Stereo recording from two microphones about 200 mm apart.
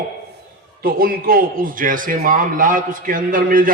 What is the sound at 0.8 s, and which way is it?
A man's voice, 45° right (ahead or behind).